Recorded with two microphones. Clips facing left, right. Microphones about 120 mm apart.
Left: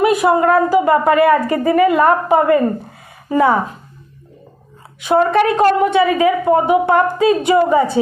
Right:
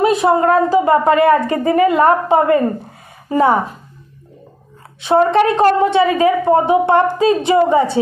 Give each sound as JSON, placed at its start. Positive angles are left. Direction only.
{"t": 0.0, "sound": "speech", "side_deg": -25}
{"t": 5.0, "sound": "speech", "side_deg": -30}